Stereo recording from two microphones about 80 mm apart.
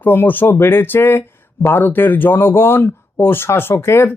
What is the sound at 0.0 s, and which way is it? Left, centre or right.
Speech, left.